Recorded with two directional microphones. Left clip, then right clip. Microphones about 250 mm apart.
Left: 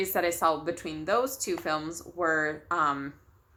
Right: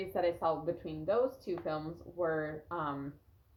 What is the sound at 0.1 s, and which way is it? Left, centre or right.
Speech, centre.